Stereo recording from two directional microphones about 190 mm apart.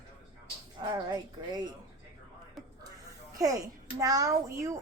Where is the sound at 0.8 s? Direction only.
20° right (ahead or behind).